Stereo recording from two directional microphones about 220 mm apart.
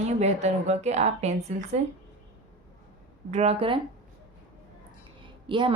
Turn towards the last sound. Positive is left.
turn(degrees=-20)  # may be behind; listen again after turning